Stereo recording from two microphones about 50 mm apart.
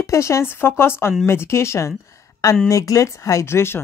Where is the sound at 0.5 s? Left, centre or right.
Left.